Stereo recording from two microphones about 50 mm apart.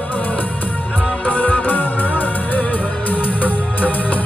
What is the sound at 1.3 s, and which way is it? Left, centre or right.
Music, left.